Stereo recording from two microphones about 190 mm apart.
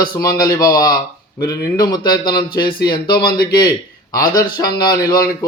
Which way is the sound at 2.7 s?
55° left (ahead or behind).